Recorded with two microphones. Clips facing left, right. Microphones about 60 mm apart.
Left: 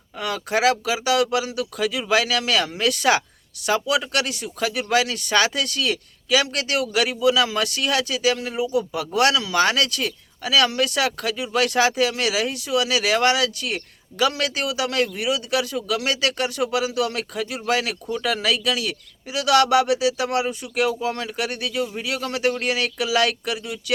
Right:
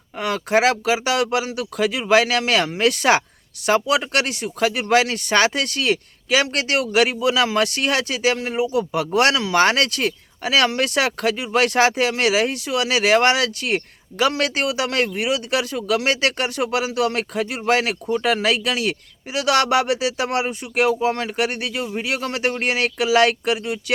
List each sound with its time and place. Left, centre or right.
0.2 s speech: right